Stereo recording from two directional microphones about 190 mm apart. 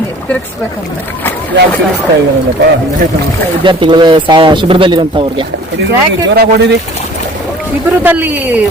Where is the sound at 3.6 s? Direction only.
25° right (ahead or behind).